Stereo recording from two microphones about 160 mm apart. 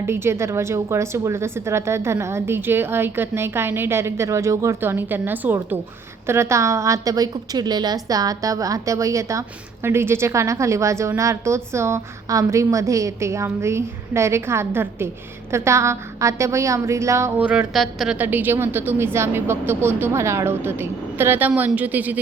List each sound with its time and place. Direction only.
0.0 s a woman's voice: 15° right (ahead or behind)